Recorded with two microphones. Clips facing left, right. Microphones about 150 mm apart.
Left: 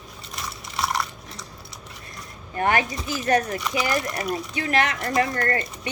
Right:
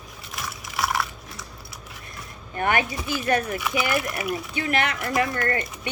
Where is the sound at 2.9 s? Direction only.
Centre (ahead or behind).